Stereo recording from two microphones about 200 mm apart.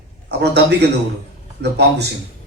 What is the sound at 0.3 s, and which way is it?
A man's voice, 55° right (ahead or behind).